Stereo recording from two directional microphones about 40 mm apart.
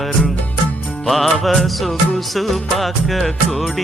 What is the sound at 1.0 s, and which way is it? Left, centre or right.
Music, centre.